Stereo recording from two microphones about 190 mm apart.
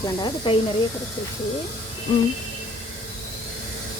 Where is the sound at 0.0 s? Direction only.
25° left (ahead or behind).